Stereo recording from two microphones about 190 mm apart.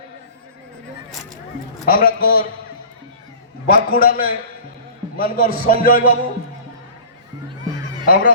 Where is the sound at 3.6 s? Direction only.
50° left (ahead or behind).